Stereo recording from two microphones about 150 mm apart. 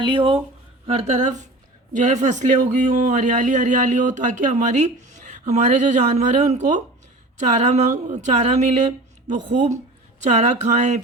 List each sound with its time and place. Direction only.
0.1 s speech: 35° right (ahead or behind)
0.9 s speech: 45° right (ahead or behind)